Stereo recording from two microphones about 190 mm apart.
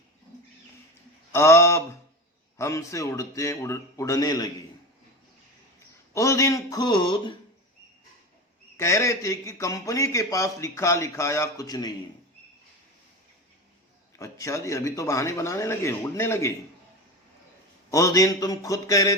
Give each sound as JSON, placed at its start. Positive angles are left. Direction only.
{"t": 1.3, "sound": "a man's voice", "side_deg": 15}
{"t": 6.1, "sound": "speech", "side_deg": 15}
{"t": 8.8, "sound": "a man's voice", "side_deg": 15}
{"t": 14.2, "sound": "a man's voice", "side_deg": 15}
{"t": 17.9, "sound": "a man's voice", "side_deg": 15}